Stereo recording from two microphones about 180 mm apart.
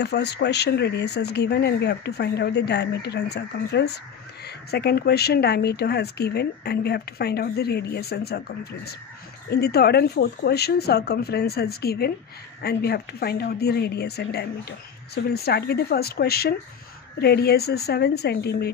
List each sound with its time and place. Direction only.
0.0 s speech: 70° left (ahead or behind)
9.5 s speech: 65° left (ahead or behind)